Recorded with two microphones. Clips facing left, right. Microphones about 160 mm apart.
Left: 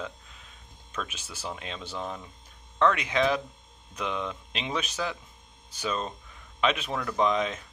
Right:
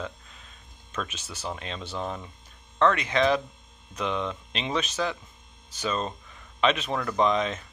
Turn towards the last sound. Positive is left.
turn(degrees=5)  # may be behind; listen again after turning